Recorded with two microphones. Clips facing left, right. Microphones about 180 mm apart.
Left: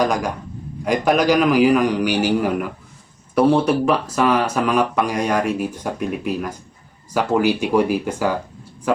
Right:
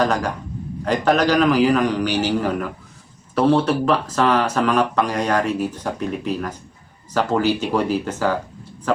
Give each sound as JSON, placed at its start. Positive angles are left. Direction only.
{"t": 0.0, "sound": "speech", "side_deg": 10}